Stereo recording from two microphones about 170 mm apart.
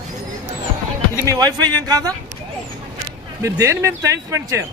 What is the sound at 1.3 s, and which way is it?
Speech, 25° right (ahead or behind).